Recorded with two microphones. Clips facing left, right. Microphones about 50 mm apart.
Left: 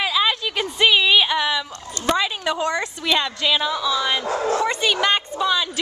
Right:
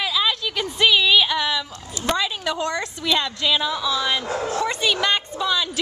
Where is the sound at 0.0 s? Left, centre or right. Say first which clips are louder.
Left 2 dB; centre.